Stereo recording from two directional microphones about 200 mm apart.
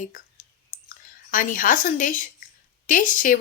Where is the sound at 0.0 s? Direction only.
40° left (ahead or behind).